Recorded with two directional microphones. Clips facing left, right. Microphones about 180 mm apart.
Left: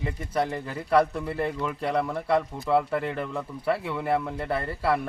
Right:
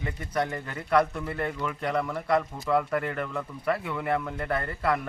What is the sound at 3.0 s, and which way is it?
Speech, 30° left (ahead or behind).